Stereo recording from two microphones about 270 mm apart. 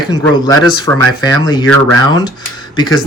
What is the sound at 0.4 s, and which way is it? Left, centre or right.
Speech, centre.